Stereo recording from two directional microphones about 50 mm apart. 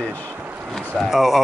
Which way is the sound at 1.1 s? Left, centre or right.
Centre.